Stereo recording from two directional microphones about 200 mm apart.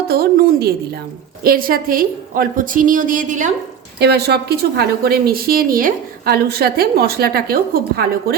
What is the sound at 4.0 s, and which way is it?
A woman's voice, 55° right (ahead or behind).